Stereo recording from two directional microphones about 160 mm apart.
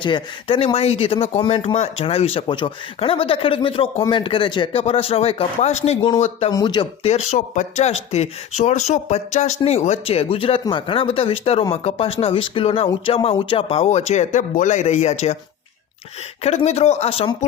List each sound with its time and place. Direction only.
0.0 s speech: 30° left (ahead or behind)
7.0 s speech: 45° left (ahead or behind)
16.4 s speech: 40° left (ahead or behind)